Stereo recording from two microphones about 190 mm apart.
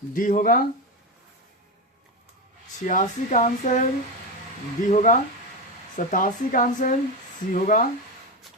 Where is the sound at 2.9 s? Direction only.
40° left (ahead or behind).